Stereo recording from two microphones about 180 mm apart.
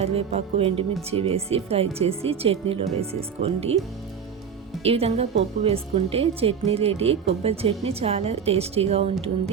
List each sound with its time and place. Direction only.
0.0 s speech: 35° right (ahead or behind)
4.8 s speech: 35° right (ahead or behind)